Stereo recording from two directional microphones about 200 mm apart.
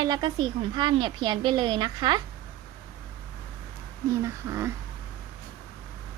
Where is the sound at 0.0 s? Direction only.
20° right (ahead or behind).